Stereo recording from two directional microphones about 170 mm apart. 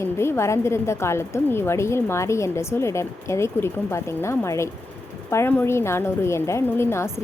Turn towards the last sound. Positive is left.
turn(degrees=15)  # may be behind; listen again after turning